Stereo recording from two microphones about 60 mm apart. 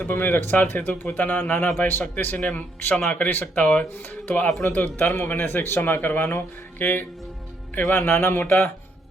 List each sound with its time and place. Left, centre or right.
0.0 s speech: left